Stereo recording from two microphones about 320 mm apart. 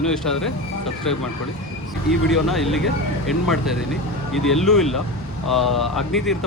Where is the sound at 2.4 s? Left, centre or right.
Centre.